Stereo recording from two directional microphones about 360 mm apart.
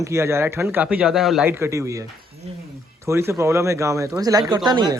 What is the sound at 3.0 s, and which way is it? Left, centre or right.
Speech, centre.